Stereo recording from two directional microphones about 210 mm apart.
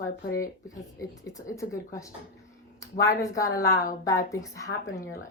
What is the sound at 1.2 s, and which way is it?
A woman's voice, 15° left (ahead or behind).